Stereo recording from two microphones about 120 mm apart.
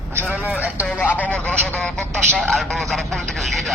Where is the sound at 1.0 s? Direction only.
15° left (ahead or behind).